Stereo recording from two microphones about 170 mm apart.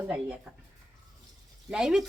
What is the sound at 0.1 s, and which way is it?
Speech, 5° right (ahead or behind).